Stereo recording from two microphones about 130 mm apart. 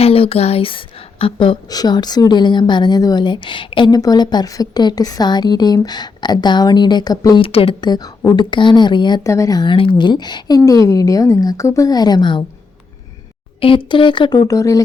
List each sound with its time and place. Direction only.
0.0 s a woman's voice: 45° left (ahead or behind); by 7.3 s 30° left (ahead or behind)
7.3 s a woman's voice: 45° left (ahead or behind)
13.6 s a woman's voice: 45° left (ahead or behind); by 14.8 s 25° left (ahead or behind)